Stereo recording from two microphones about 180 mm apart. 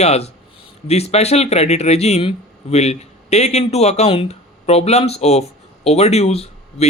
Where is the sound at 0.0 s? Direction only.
35° left (ahead or behind).